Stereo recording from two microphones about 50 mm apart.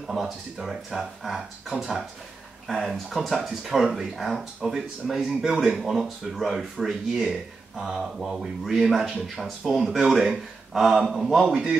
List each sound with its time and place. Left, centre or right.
0.0 s speech: centre
2.7 s speech: centre
11.4 s a man's voice: centre